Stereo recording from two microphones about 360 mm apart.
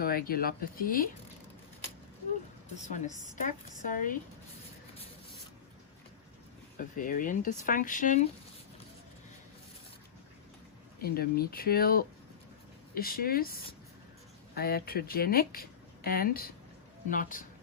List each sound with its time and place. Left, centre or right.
0.0 s speech: left
2.8 s speech: centre
6.7 s speech: left
11.0 s speech: left